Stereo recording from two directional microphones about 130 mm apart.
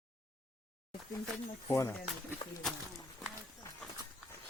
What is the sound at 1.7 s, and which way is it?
Speech, 25° left (ahead or behind).